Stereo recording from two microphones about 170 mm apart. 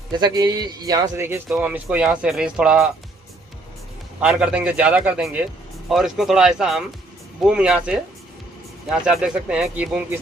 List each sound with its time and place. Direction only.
0.2 s a man's voice: 25° right (ahead or behind); by 2.9 s 5° right (ahead or behind)
4.2 s speech: 5° right (ahead or behind)